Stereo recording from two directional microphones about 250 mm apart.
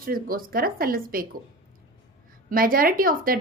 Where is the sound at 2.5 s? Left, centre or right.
Right.